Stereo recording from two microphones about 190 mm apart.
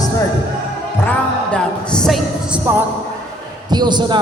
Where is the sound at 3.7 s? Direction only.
25° right (ahead or behind).